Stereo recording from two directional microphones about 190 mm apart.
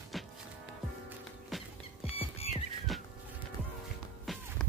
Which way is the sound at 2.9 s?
Centre (ahead or behind).